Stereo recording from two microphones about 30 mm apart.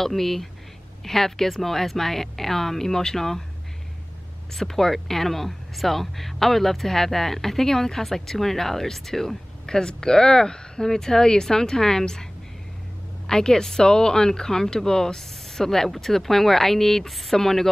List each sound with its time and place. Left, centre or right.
0.0 s speech: centre
4.6 s speech: centre
13.3 s speech: left